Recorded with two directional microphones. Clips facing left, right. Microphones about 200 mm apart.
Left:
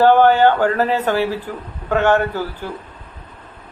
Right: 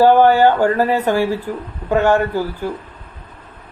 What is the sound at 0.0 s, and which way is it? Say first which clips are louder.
A man's voice: right 1 dB; 10° right (ahead or behind).